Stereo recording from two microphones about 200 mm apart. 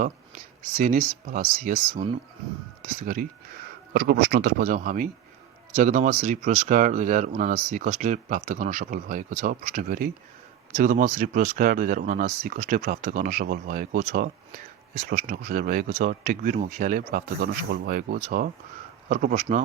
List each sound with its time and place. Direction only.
0.0 s speech: 40° right (ahead or behind)